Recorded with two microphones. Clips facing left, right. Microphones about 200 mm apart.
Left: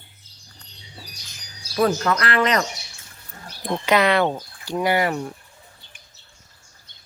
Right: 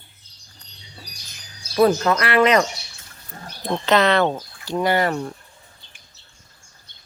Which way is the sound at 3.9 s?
10° left (ahead or behind).